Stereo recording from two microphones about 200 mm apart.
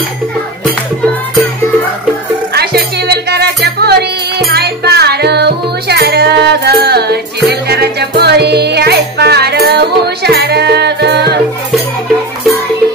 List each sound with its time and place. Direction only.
2.5 s music: 55° right (ahead or behind)